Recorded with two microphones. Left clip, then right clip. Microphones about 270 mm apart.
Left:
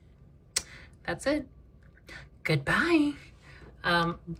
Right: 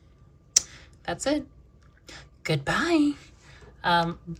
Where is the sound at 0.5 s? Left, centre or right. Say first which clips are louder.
Right 10 dB; centre.